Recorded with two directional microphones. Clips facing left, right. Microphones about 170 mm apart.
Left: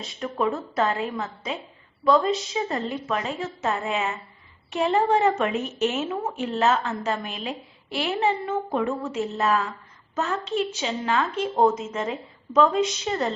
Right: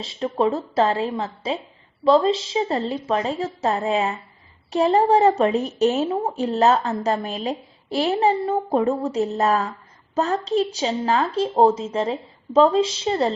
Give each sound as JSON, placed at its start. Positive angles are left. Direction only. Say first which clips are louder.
{"t": 0.0, "sound": "a woman's voice", "louder": "right 5 dB", "side_deg": -30}